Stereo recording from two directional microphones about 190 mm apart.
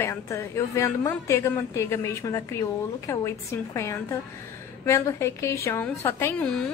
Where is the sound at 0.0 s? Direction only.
15° left (ahead or behind).